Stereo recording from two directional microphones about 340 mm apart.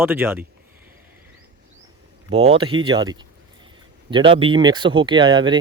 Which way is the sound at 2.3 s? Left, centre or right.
Centre.